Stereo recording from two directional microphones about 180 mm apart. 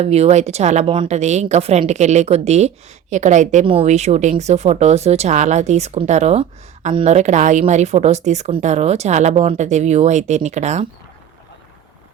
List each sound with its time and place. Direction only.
0.0 s a woman's voice: 35° right (ahead or behind)